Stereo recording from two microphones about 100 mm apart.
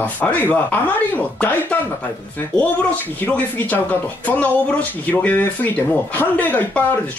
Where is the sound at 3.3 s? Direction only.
15° left (ahead or behind).